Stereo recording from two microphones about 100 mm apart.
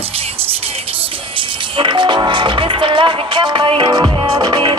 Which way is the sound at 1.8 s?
55° right (ahead or behind).